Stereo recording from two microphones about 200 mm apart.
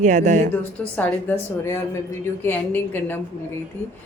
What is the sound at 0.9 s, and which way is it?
A woman's voice, 10° left (ahead or behind).